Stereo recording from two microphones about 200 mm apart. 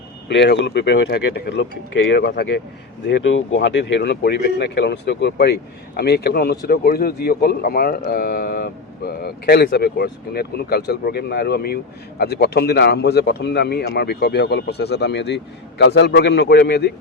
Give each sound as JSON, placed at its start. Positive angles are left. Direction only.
{"t": 0.3, "sound": "speech", "side_deg": 60}
{"t": 3.1, "sound": "a man's voice", "side_deg": 65}